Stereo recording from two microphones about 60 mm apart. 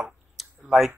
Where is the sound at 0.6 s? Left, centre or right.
Centre.